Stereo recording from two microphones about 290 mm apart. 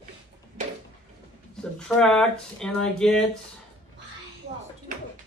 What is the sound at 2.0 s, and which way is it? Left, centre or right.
Speech, centre.